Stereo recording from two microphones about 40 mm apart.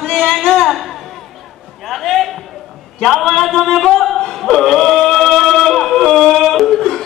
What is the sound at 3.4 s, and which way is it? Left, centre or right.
Music, centre.